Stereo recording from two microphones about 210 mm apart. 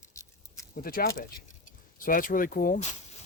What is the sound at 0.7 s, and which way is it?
Speech, 45° left (ahead or behind).